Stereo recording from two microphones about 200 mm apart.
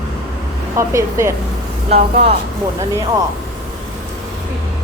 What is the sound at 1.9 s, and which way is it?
Speech, 35° right (ahead or behind).